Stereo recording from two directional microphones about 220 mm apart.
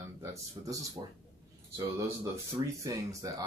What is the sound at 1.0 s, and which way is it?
Speech, 15° right (ahead or behind).